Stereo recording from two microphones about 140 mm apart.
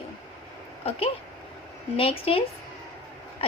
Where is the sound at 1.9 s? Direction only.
40° left (ahead or behind).